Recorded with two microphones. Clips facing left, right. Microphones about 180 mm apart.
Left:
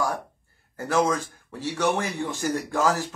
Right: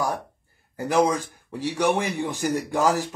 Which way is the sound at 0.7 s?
15° right (ahead or behind).